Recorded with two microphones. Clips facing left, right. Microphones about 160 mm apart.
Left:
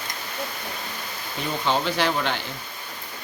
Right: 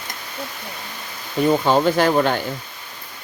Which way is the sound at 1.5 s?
45° right (ahead or behind).